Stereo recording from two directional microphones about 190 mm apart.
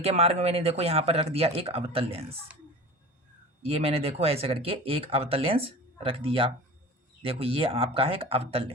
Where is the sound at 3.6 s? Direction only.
30° right (ahead or behind).